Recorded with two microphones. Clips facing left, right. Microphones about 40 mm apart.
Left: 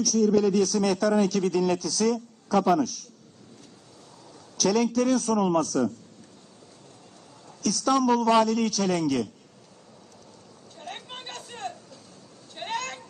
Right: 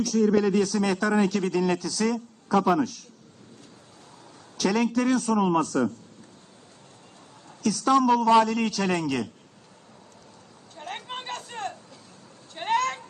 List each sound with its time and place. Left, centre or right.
0.1 s a woman's voice: right
4.6 s speech: right
7.9 s speech: right
10.8 s vehicle: right
12.5 s cat: right